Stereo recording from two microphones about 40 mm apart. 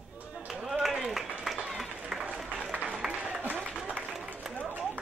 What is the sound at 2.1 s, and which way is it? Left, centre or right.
Applause, centre.